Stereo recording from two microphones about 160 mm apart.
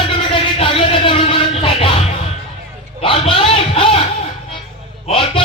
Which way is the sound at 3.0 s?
35° left (ahead or behind).